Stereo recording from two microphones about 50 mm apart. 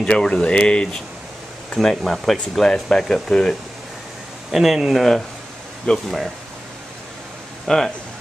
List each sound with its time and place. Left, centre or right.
0.0 s speech: centre
1.8 s speech: centre
4.5 s speech: centre
4.9 s speech: centre
5.9 s speech: centre
7.6 s speech: centre